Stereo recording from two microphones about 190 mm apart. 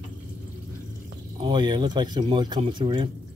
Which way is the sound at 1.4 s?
25° right (ahead or behind).